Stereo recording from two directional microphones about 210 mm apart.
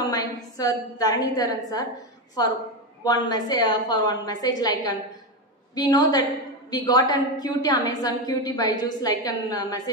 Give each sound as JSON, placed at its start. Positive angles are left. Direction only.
{"t": 0.0, "sound": "a woman's voice", "side_deg": 15}